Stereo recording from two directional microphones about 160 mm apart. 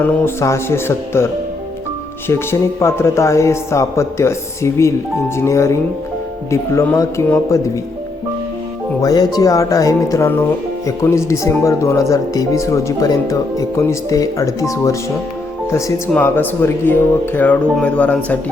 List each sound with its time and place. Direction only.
0.0 s speech: 15° left (ahead or behind)
9.0 s speech: 25° left (ahead or behind); by 18.3 s 10° left (ahead or behind)